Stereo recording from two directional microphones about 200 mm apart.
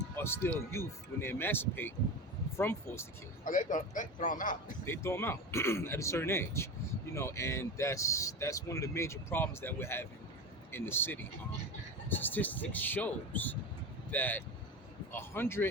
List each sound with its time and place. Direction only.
0.2 s speech: 10° left (ahead or behind)
3.4 s a man's voice: 40° left (ahead or behind)
4.9 s speech: 10° left (ahead or behind)